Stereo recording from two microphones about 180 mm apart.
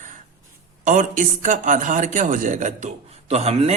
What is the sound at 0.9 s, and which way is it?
A man's voice, 45° right (ahead or behind).